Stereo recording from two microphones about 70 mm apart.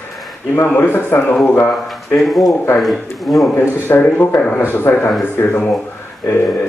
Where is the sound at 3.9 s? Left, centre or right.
Left.